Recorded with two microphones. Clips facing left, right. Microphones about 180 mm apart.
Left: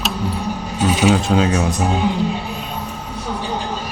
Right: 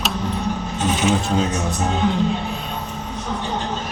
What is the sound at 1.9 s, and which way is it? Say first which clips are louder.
Speech: right 3 dB; 10° left (ahead or behind).